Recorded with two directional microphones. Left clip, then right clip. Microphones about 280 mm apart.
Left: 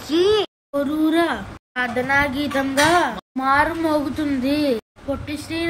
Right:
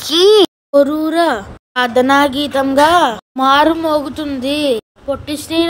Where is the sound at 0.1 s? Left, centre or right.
Centre.